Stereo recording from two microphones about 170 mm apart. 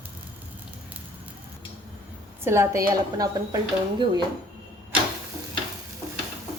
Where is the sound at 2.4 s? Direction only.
15° right (ahead or behind).